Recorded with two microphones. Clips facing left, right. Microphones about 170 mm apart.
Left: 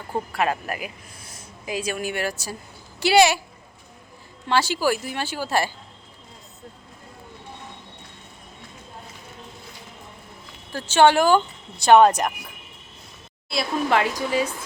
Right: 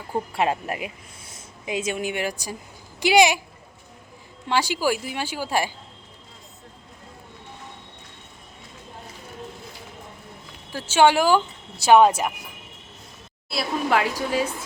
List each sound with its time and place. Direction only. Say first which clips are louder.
0.3 s speech: right 1 dB; 25° right (ahead or behind)
4.4 s speech: left 1 dB; 15° right (ahead or behind)
10.7 s speech: left 1 dB; 10° right (ahead or behind)
13.5 s a woman's voice: left 1 dB; 5° right (ahead or behind)